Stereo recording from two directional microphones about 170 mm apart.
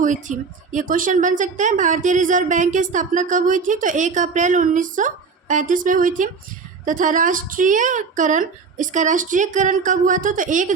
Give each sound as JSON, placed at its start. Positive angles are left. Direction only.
{"t": 0.0, "sound": "a woman's voice", "side_deg": -50}